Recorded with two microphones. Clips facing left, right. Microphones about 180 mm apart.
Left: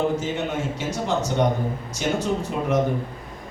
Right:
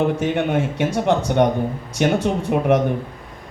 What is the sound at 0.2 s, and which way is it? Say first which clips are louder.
Speech: right 6 dB; 60° right (ahead or behind).